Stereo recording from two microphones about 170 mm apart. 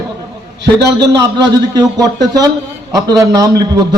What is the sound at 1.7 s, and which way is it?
A man's voice, 20° right (ahead or behind).